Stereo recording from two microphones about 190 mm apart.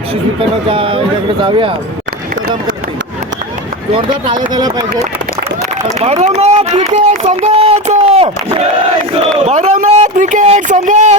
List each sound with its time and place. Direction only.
0.7 s speech: 30° right (ahead or behind)
3.9 s speech: 25° right (ahead or behind)
5.9 s speech: 35° right (ahead or behind)